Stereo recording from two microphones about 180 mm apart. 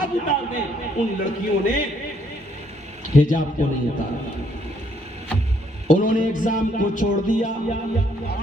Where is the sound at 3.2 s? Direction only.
45° left (ahead or behind).